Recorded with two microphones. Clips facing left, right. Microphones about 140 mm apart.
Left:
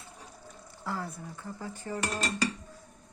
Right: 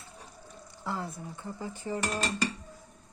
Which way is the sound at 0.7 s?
20° right (ahead or behind).